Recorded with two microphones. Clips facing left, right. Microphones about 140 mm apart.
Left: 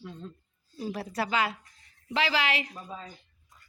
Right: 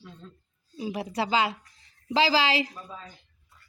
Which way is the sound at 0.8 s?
15° right (ahead or behind).